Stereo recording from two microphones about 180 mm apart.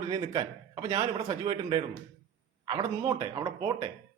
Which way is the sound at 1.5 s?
25° right (ahead or behind).